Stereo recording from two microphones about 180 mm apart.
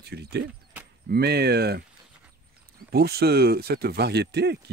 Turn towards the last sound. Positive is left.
turn(degrees=-65)  # may be behind; listen again after turning